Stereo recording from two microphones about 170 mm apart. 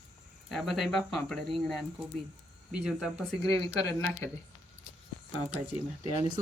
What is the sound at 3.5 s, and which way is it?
Speech, 20° left (ahead or behind).